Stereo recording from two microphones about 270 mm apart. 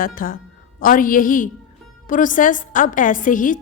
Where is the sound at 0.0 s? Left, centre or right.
Left.